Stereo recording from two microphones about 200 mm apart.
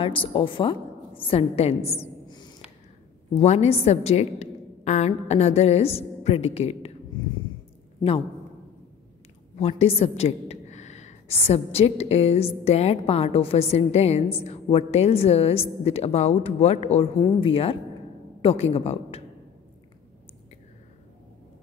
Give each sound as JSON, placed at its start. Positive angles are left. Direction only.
{"t": 0.0, "sound": "a woman's voice", "side_deg": 25}
{"t": 2.0, "sound": "a sound", "side_deg": 20}
{"t": 3.3, "sound": "a woman's voice", "side_deg": 30}
{"t": 9.6, "sound": "a woman's voice", "side_deg": 30}